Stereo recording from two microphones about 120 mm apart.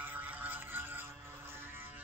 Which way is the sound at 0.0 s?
15° right (ahead or behind).